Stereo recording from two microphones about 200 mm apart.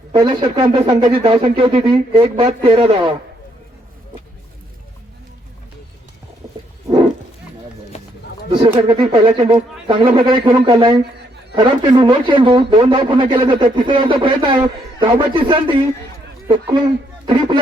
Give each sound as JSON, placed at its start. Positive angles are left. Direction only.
{"t": 0.1, "sound": "a man's voice", "side_deg": -20}
{"t": 6.4, "sound": "wild animals", "side_deg": -30}
{"t": 6.8, "sound": "roaring cats", "side_deg": -25}
{"t": 8.7, "sound": "a man's voice", "side_deg": -25}